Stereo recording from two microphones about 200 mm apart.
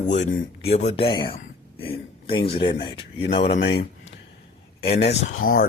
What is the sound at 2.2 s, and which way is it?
Speech, 25° left (ahead or behind).